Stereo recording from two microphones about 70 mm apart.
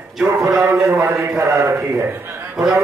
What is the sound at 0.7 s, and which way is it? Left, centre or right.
Speech, right.